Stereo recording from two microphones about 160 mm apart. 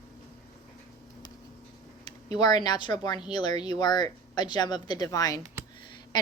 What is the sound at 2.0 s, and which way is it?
A woman's voice, 25° left (ahead or behind).